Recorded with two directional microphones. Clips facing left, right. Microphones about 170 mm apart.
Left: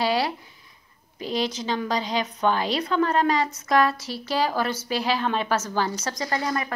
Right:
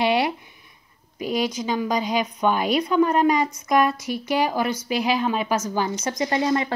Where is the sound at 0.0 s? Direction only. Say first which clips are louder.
Right 3 dB; 20° right (ahead or behind).